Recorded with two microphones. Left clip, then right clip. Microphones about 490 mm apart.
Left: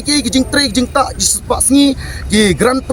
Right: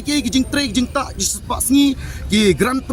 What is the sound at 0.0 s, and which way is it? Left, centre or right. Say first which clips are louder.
Speech: left 5 dB; right.